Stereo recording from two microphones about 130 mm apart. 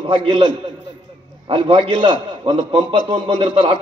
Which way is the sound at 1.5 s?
40° right (ahead or behind).